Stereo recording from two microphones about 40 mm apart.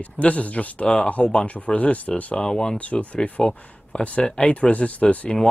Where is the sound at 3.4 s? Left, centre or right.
Left.